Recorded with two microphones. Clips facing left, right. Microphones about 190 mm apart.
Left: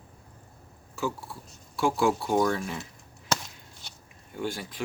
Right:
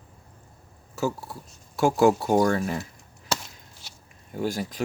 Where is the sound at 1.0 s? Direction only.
40° right (ahead or behind).